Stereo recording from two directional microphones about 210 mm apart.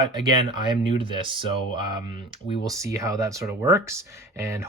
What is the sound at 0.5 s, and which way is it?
Speech, 20° right (ahead or behind).